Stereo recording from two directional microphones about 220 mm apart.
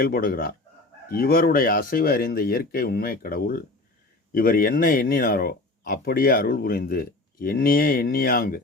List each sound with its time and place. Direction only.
0.0 s speech: 40° left (ahead or behind)